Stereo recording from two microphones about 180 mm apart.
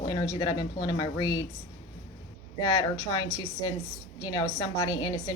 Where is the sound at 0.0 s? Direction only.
25° left (ahead or behind).